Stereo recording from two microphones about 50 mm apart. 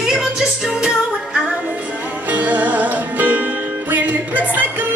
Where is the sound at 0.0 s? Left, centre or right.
Centre.